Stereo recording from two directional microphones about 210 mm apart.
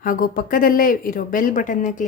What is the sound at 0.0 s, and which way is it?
A woman's voice, 40° left (ahead or behind).